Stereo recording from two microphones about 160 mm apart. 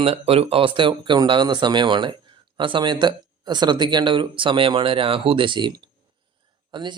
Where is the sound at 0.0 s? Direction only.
35° right (ahead or behind).